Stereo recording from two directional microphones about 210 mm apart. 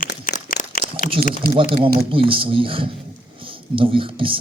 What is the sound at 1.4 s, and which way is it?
Speech, 45° right (ahead or behind).